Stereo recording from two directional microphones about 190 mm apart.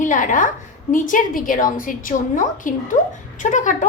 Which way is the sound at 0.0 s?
45° left (ahead or behind).